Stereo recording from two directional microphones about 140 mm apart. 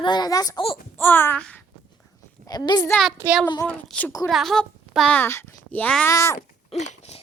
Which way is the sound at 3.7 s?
10° left (ahead or behind).